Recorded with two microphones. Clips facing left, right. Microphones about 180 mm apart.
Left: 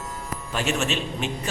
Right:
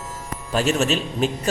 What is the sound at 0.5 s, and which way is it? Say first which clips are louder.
Speech: right 5 dB; 40° right (ahead or behind).